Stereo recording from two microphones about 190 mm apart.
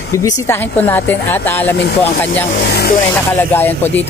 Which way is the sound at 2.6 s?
60° left (ahead or behind).